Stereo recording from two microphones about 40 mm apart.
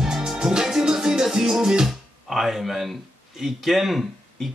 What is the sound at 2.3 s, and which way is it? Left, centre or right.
Speech, centre.